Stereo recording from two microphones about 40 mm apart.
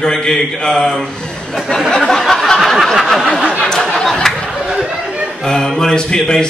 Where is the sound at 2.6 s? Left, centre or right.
Centre.